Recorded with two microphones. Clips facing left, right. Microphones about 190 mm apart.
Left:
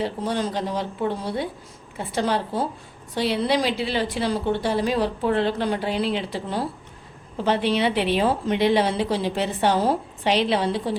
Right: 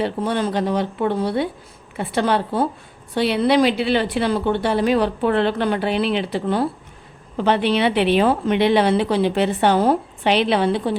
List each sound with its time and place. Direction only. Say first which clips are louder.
0.0 s a woman's voice: right 4 dB; 60° right (ahead or behind)